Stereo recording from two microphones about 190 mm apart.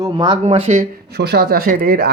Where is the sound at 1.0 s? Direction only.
60° right (ahead or behind).